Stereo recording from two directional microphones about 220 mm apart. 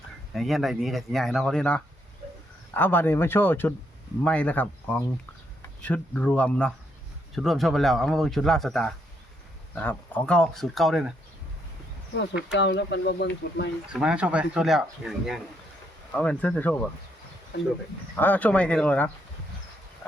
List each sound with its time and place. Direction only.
0.3 s speech: centre (ahead or behind)
12.1 s speech: 55° left (ahead or behind)
13.9 s speech: 5° right (ahead or behind)
18.2 s speech: 5° left (ahead or behind)